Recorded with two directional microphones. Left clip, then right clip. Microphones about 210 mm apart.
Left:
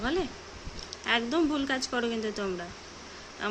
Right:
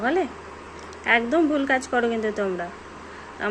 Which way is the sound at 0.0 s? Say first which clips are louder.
Right 7 dB; 35° left (ahead or behind).